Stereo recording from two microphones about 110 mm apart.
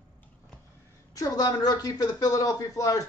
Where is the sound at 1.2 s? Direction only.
35° left (ahead or behind).